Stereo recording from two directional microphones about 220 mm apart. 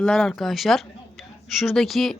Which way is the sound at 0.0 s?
5° left (ahead or behind).